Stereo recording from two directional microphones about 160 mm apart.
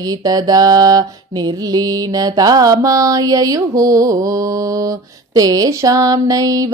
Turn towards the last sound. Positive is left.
turn(degrees=-20)  # may be behind; listen again after turning